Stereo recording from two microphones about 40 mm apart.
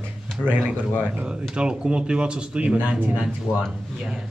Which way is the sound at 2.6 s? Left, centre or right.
Right.